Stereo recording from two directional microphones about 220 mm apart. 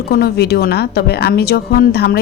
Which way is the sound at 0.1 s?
45° left (ahead or behind).